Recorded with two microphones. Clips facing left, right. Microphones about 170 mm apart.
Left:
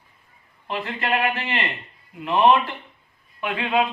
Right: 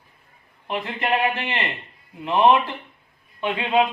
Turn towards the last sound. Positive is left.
turn(degrees=-20)  # may be behind; listen again after turning